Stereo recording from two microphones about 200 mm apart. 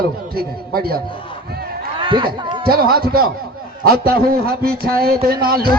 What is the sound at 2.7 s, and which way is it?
A man's voice, 50° right (ahead or behind).